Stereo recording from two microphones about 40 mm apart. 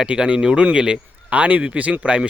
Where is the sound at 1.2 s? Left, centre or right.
Right.